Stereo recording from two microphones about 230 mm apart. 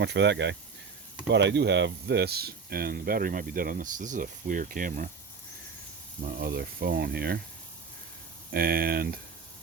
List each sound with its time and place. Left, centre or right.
0.0 s speech: right
6.2 s speech: right
8.5 s speech: right